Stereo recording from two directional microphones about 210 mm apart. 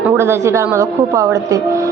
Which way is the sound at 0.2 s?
15° right (ahead or behind).